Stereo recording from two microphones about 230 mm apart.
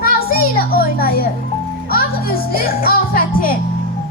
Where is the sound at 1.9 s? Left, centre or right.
Left.